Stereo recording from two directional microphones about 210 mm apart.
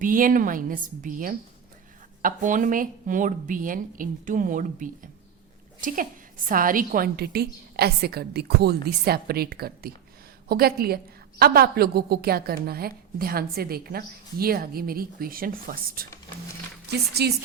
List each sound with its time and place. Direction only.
0.0 s a woman's voice: 40° right (ahead or behind)
17.2 s a woman's voice: 50° right (ahead or behind)